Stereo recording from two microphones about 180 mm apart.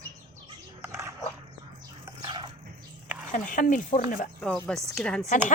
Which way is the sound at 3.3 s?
45° left (ahead or behind).